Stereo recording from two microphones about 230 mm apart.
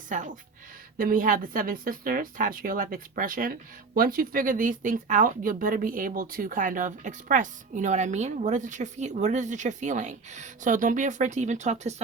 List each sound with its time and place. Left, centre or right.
0.1 s a woman's voice: right